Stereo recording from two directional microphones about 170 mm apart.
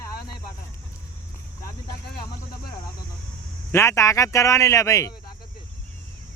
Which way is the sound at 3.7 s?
15° left (ahead or behind).